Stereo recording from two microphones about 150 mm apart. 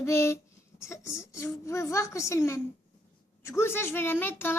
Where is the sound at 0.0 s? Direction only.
20° left (ahead or behind).